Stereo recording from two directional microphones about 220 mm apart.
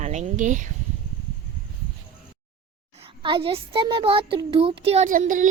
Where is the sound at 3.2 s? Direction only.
25° right (ahead or behind).